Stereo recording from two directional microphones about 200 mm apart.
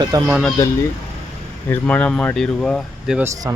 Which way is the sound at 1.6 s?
10° left (ahead or behind).